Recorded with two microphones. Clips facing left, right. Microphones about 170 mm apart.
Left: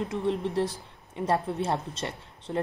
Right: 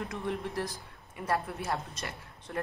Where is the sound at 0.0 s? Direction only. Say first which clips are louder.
Left 6 dB; 20° left (ahead or behind).